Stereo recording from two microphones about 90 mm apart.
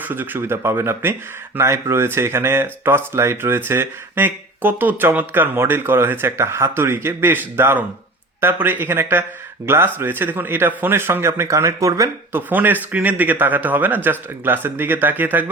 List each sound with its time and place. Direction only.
0.0 s speech: 25° right (ahead or behind)
12.3 s speech: 20° right (ahead or behind)